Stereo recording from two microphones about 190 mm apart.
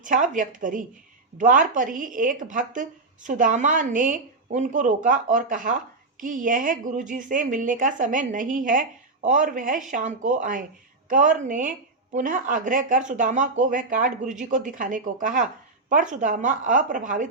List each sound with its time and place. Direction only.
0.0 s a woman's voice: 45° right (ahead or behind)